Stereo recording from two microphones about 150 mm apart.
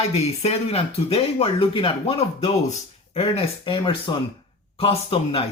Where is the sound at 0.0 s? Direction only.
45° left (ahead or behind).